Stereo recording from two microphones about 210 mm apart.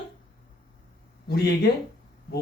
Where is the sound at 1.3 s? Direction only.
50° left (ahead or behind).